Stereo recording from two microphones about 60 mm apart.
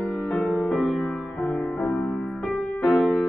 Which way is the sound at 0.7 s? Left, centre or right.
Centre.